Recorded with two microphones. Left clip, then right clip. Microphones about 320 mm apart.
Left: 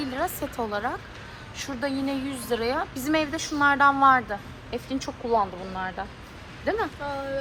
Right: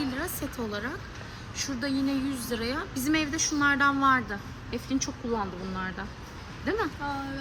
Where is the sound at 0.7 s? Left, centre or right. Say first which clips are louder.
Left 5 dB; centre.